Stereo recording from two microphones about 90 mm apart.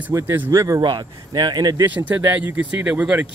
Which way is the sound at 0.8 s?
55° right (ahead or behind).